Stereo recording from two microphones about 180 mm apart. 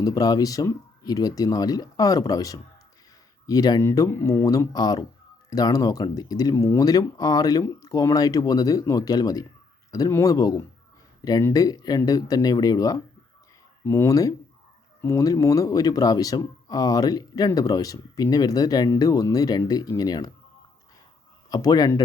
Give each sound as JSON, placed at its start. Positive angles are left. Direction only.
{"t": 0.0, "sound": "speech", "side_deg": 20}
{"t": 21.5, "sound": "speech", "side_deg": 20}